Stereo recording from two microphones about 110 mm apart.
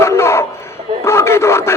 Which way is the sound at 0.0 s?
25° left (ahead or behind).